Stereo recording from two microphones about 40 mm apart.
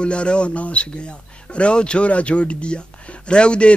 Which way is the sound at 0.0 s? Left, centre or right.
Left.